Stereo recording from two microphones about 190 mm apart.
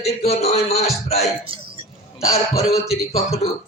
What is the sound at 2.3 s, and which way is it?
Speech, 35° left (ahead or behind).